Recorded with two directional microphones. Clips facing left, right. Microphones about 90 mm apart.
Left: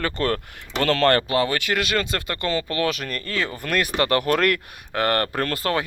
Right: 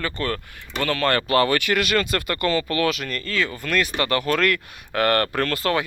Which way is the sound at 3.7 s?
45° left (ahead or behind).